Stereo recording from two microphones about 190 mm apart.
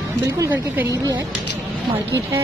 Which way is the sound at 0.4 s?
15° right (ahead or behind).